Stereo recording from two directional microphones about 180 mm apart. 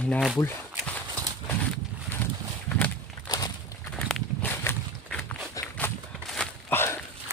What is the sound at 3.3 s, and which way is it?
Walk, 20° left (ahead or behind).